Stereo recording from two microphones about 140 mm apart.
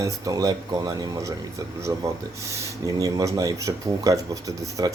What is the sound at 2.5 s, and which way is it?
Speech, 25° right (ahead or behind).